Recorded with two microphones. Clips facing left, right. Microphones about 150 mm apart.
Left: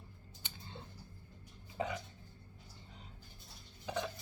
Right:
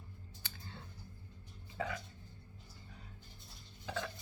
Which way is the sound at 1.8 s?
20° left (ahead or behind).